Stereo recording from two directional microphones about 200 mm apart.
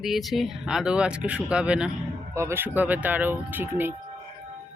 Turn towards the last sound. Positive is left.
turn(degrees=-10)  # may be behind; listen again after turning